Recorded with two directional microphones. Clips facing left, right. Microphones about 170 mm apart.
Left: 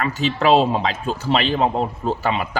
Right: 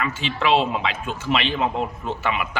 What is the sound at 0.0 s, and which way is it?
A man's voice, 40° left (ahead or behind).